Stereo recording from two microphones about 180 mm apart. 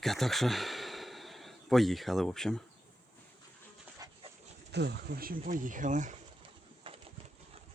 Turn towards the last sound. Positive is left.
turn(degrees=-30)  # may be behind; listen again after turning